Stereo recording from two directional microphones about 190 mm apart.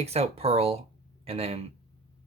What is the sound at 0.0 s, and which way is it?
A man's voice, 35° right (ahead or behind).